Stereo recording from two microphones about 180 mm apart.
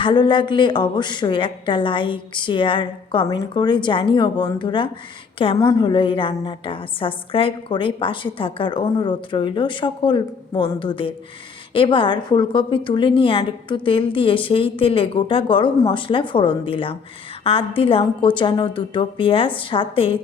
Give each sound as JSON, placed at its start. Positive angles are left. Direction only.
{"t": 0.0, "sound": "a woman's voice", "side_deg": 25}